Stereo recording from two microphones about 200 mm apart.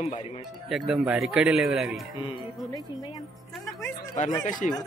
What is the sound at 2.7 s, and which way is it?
Speech, 20° left (ahead or behind).